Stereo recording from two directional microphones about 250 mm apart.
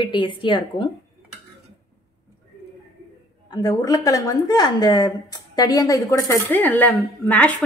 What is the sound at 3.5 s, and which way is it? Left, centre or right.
Speech, centre.